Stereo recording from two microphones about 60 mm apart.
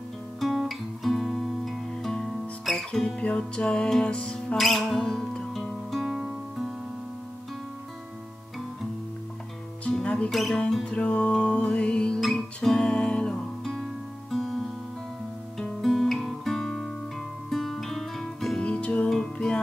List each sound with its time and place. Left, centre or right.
0.4 s music: centre
3.2 s music: centre
4.6 s music: centre
10.0 s music: centre
10.3 s music: centre
10.9 s music: centre
12.2 s guitar: centre
12.6 s music: centre
15.5 s guitar: centre
17.5 s music: centre
18.6 s music: centre